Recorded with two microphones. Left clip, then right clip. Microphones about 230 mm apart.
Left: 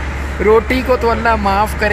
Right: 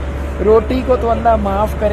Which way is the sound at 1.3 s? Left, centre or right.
Centre.